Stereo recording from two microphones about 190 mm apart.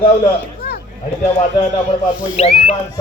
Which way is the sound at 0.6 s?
60° left (ahead or behind).